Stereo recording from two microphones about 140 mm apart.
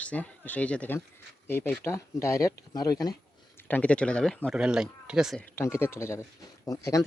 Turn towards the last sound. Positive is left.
turn(degrees=25)  # may be behind; listen again after turning